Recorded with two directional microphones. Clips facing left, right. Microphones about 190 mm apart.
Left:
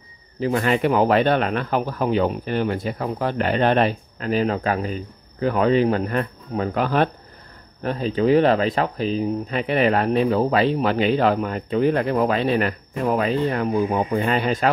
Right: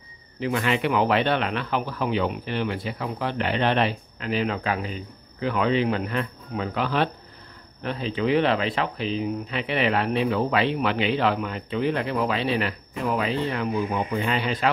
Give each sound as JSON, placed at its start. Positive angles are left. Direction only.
{"t": 0.4, "sound": "speech", "side_deg": 40}